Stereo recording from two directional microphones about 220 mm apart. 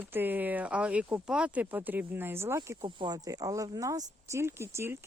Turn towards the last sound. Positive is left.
turn(degrees=-10)  # may be behind; listen again after turning